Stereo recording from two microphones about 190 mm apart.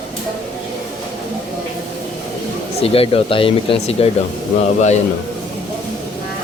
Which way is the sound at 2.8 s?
30° left (ahead or behind).